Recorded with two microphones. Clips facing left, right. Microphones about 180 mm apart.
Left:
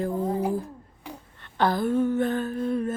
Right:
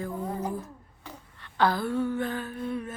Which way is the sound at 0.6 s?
15° left (ahead or behind).